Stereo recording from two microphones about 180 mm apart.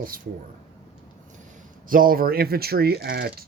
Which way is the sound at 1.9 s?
50° right (ahead or behind).